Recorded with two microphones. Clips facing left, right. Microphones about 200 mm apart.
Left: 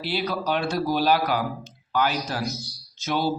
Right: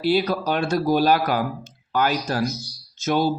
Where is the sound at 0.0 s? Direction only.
45° right (ahead or behind).